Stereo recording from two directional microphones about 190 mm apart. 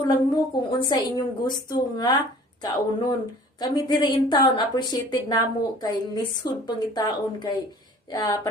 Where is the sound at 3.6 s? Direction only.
25° left (ahead or behind).